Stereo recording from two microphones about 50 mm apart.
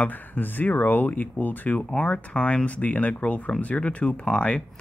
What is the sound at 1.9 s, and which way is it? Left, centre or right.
Speech, centre.